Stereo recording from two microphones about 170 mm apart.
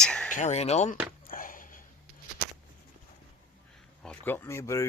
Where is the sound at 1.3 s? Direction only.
55° left (ahead or behind).